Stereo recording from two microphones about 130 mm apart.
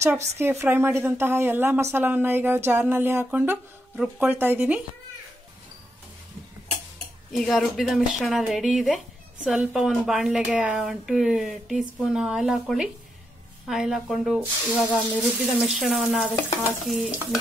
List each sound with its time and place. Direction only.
0.4 s speech: 20° right (ahead or behind)
7.3 s speech: centre (ahead or behind)
14.7 s speech: 10° right (ahead or behind)